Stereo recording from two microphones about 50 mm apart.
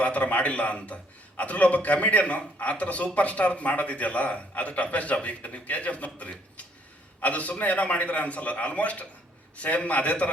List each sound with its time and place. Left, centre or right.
0.0 s a man's voice: left